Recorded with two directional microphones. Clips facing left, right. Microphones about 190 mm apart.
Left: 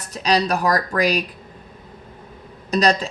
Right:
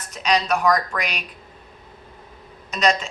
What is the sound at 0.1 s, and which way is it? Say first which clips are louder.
Speech: left 2 dB; 35° left (ahead or behind).